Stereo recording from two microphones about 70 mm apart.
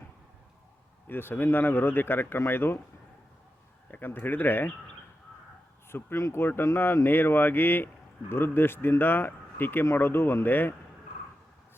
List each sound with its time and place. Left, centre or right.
1.0 s speech: left
3.9 s speech: left
5.9 s speech: left